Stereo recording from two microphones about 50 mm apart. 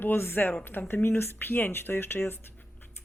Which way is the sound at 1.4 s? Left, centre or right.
Left.